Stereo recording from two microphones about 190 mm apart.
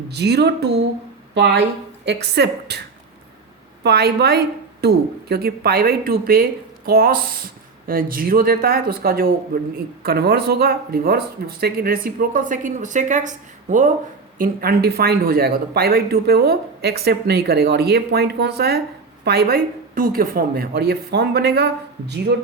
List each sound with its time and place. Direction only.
0.1 s speech: 60° right (ahead or behind)
3.8 s speech: 60° right (ahead or behind)